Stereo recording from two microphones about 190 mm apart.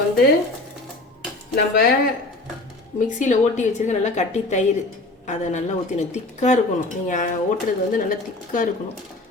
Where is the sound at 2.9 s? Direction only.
40° left (ahead or behind).